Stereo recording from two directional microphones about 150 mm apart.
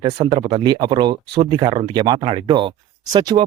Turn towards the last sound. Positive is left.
turn(degrees=-30)  # may be behind; listen again after turning